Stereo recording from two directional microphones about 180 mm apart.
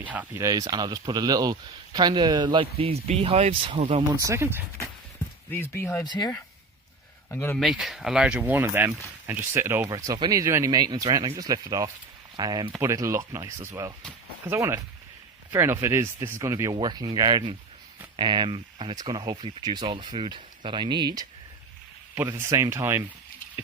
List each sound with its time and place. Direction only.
0.0 s speech: 10° right (ahead or behind); by 4.0 s 35° right (ahead or behind)
4.2 s speech: 15° right (ahead or behind)
5.5 s speech: 10° left (ahead or behind)
7.6 s speech: centre (ahead or behind)